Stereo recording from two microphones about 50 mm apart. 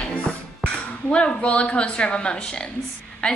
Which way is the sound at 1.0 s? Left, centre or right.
Left.